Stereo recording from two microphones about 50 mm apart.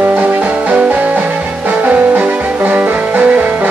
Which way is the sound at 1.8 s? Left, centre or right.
Right.